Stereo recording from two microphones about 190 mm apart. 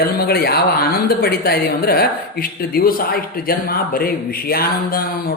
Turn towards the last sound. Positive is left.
turn(degrees=50)  # may be behind; listen again after turning